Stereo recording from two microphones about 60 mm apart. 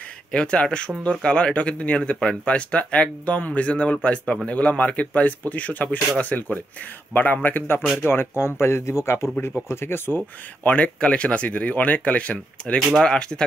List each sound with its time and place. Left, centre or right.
0.3 s a man's voice: centre; by 10.2 s left
10.6 s speech: left